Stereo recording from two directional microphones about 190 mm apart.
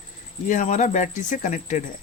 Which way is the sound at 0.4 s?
40° left (ahead or behind).